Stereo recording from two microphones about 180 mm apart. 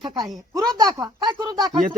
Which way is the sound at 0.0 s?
25° right (ahead or behind).